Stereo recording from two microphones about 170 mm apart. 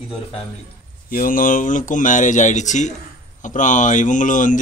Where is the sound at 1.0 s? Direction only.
55° left (ahead or behind).